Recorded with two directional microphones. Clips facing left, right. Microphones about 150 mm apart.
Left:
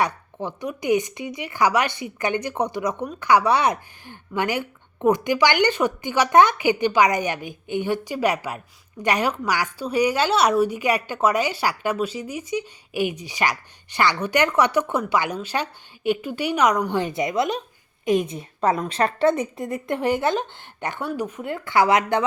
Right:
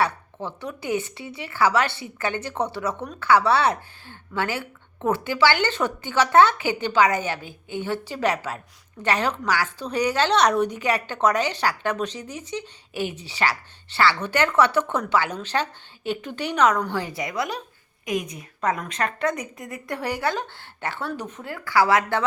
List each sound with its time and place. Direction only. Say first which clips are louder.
0.0 s a woman's voice: left 1 dB; 15° left (ahead or behind)
21.4 s a woman's voice: left 1 dB; 20° left (ahead or behind)